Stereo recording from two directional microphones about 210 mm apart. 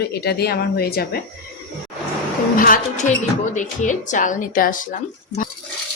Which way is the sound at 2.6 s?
40° left (ahead or behind).